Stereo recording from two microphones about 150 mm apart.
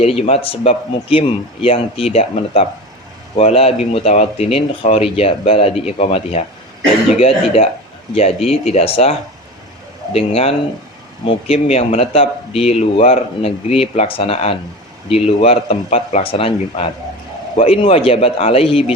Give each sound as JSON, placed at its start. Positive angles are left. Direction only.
{"t": 0.0, "sound": "speech", "side_deg": 40}